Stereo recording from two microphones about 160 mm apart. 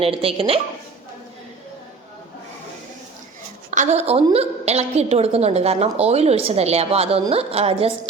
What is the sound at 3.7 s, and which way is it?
A woman's voice, 50° right (ahead or behind).